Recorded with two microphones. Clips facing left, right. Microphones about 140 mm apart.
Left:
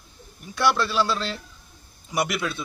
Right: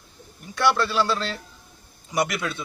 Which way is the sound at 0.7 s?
20° right (ahead or behind).